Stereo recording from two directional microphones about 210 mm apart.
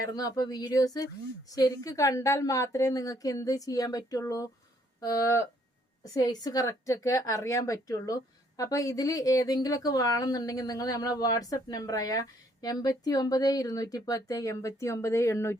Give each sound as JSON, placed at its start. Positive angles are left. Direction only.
{"t": 0.1, "sound": "a woman's voice", "side_deg": 20}